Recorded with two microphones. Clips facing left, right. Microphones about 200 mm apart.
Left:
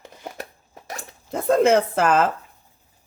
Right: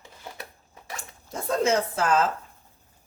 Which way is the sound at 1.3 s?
55° left (ahead or behind).